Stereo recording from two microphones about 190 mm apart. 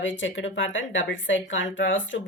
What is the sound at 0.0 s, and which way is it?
Speech, 80° left.